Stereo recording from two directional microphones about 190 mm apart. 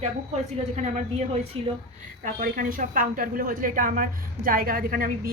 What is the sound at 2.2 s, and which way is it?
A woman's voice, 45° right (ahead or behind).